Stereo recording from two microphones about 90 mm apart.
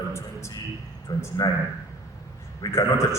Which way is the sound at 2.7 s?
30° left (ahead or behind).